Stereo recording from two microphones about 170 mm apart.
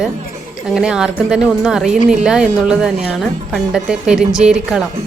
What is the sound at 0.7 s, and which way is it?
Speech, 5° right (ahead or behind).